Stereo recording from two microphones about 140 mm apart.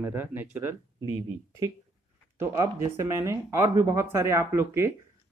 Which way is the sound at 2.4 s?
20° right (ahead or behind).